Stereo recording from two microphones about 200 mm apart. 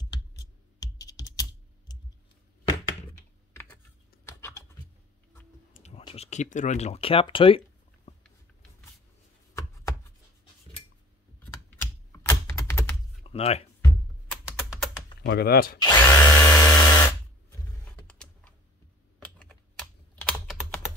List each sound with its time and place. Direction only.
0.1 s computer keyboard: 20° left (ahead or behind)
1.9 s clicking: 20° left (ahead or behind)
3.5 s typing: 10° left (ahead or behind)
5.7 s speech: 35° left (ahead or behind)
9.5 s chopping: 15° left (ahead or behind)
12.2 s typing: 15° left (ahead or behind)
13.2 s a sound: 30° left (ahead or behind)
14.3 s typing: 5° right (ahead or behind)
15.2 s speech: 55° left (ahead or behind)
15.8 s drill: 15° left (ahead or behind)
18.0 s typing: 5° left (ahead or behind)
19.1 s computer keyboard: 5° left (ahead or behind)